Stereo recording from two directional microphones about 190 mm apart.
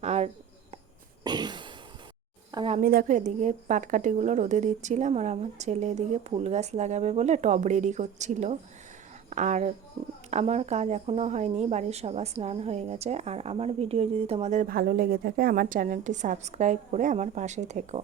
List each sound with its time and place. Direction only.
0.0 s a sound: 35° right (ahead or behind)
1.2 s throat clearing: 20° right (ahead or behind)
2.5 s speech: 25° right (ahead or behind)
2.7 s a woman's voice: 50° right (ahead or behind)